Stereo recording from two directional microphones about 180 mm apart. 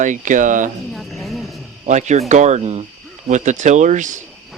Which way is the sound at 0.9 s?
Centre (ahead or behind).